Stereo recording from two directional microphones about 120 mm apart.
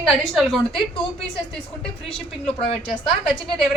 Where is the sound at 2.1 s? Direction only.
50° left (ahead or behind).